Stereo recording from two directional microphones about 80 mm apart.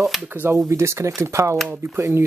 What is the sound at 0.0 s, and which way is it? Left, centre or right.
Speech, centre.